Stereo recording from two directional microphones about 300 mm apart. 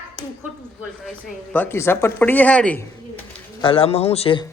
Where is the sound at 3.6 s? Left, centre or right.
Centre.